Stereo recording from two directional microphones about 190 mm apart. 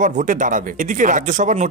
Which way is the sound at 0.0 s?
45° right (ahead or behind).